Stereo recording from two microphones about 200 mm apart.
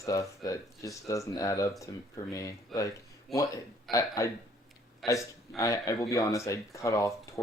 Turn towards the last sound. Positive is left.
turn(degrees=15)  # may be behind; listen again after turning